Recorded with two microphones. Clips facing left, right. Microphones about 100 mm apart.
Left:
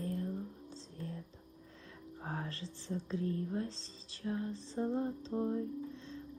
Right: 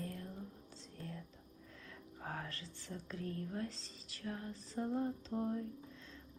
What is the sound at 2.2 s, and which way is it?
Speech, 25° left (ahead or behind).